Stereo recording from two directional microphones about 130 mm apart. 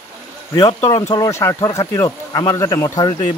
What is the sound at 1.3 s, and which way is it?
Speech, 25° left (ahead or behind).